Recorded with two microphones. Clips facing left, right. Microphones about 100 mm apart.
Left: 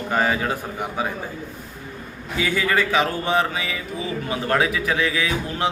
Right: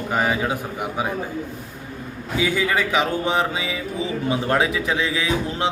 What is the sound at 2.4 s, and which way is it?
A man's voice, 15° right (ahead or behind).